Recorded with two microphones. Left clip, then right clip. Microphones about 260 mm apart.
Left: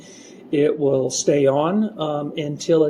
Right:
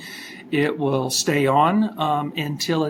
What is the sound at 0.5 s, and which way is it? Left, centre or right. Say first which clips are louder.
Speech: left 4 dB; right.